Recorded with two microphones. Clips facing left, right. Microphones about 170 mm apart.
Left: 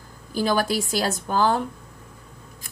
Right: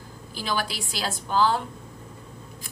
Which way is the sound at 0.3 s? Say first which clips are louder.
Left 7 dB; 45° left (ahead or behind).